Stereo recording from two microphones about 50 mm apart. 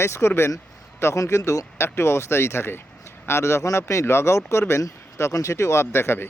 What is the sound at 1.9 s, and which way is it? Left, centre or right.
Speech, left.